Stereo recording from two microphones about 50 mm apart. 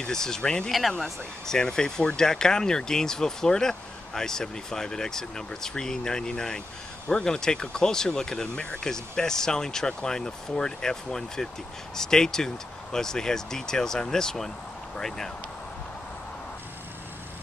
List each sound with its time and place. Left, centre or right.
0.0 s speech: centre
0.7 s speech: centre
1.4 s speech: centre